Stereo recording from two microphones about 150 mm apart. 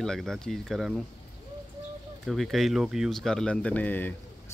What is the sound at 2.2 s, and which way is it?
Speech, centre (ahead or behind).